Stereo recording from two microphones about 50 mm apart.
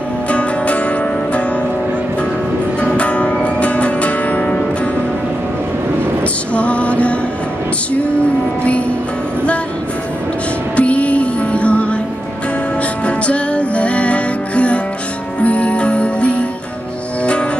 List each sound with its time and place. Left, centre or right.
0.3 s music: left
2.8 s music: left
6.5 s music: left
10.8 s music: left
13.0 s music: left